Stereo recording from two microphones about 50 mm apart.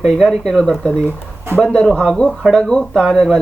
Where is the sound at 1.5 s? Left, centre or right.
Right.